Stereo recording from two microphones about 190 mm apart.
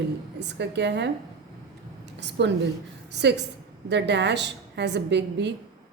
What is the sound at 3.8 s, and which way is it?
A woman's voice, 65° right (ahead or behind).